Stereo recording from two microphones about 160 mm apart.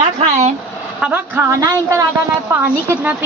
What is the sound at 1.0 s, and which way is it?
Speech, 10° right (ahead or behind).